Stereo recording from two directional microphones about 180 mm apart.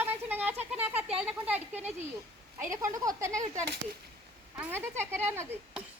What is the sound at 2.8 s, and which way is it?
A child's voice, 20° right (ahead or behind).